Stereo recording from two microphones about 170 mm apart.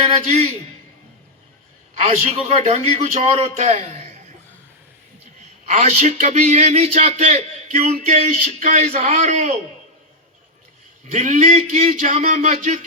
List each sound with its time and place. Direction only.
0.0 s a man's voice: 40° right (ahead or behind)
2.0 s a man's voice: 45° right (ahead or behind)
5.6 s a man's voice: 45° right (ahead or behind)
11.1 s a man's voice: 45° right (ahead or behind)